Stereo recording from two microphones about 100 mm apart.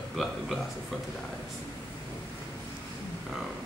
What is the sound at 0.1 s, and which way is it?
Speech, 5° right (ahead or behind).